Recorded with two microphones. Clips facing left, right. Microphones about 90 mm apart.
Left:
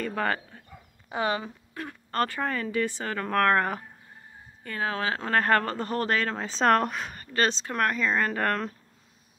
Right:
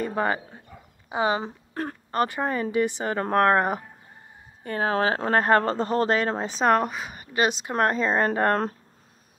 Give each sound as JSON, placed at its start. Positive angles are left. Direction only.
{"t": 0.0, "sound": "a sound", "side_deg": -20}
{"t": 1.7, "sound": "a sound", "side_deg": -40}
{"t": 2.0, "sound": "speech", "side_deg": -15}
{"t": 4.6, "sound": "speech", "side_deg": -35}
{"t": 6.5, "sound": "speech", "side_deg": -5}
{"t": 7.7, "sound": "speech", "side_deg": -30}